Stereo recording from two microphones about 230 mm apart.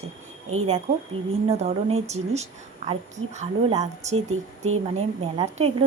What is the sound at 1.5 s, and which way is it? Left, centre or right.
A woman's voice, right.